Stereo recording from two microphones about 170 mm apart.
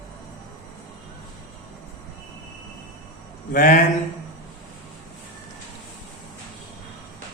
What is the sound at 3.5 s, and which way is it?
Music, 50° left (ahead or behind).